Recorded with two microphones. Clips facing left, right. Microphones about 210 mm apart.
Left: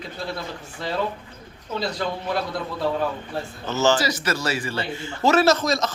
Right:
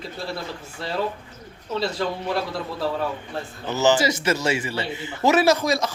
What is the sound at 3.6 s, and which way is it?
Speech, 15° right (ahead or behind).